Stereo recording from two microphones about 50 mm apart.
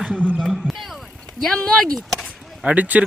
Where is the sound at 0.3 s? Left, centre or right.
Centre.